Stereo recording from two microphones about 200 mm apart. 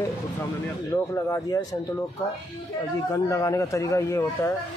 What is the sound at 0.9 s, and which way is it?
Speech, 15° left (ahead or behind).